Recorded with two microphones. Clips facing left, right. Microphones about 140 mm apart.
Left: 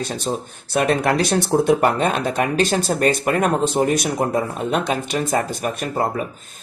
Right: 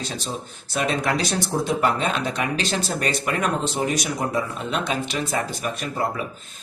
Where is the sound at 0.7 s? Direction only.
55° left (ahead or behind).